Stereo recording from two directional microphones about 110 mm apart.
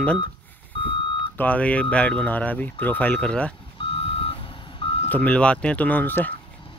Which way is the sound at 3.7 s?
60° left (ahead or behind).